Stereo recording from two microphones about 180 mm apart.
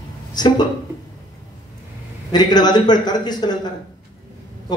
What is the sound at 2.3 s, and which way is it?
A man's voice, 25° left (ahead or behind).